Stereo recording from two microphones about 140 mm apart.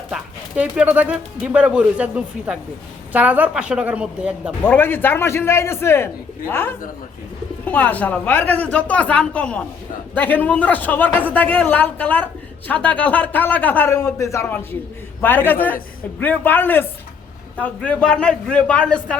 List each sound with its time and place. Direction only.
0.1 s speech: 10° right (ahead or behind)
4.6 s a man's voice: 15° left (ahead or behind)